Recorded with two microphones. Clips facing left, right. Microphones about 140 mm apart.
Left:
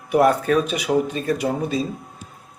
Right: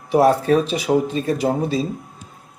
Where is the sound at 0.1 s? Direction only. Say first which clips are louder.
Right 2 dB; 30° right (ahead or behind).